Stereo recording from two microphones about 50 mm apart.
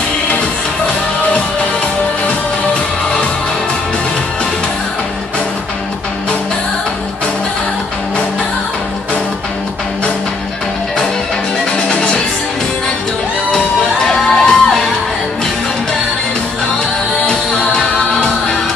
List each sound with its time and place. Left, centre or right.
11.9 s music: centre
13.5 s music: centre
17.3 s music: centre